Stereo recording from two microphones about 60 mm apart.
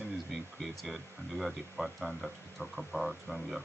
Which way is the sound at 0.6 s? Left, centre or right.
Centre.